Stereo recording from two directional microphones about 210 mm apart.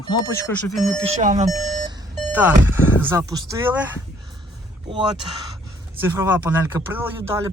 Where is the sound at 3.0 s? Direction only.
15° right (ahead or behind).